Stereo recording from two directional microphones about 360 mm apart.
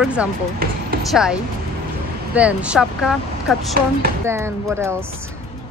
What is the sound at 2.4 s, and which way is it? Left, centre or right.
A woman's voice, centre.